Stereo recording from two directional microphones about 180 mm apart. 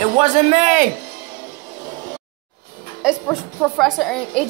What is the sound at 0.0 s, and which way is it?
Speech, 35° right (ahead or behind).